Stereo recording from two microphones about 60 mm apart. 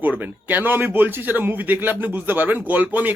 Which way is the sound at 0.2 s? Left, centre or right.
Right.